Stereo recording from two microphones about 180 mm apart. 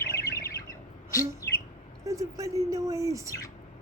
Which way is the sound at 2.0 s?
20° right (ahead or behind).